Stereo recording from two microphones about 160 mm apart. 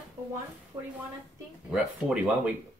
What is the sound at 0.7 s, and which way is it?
Speech, 15° right (ahead or behind).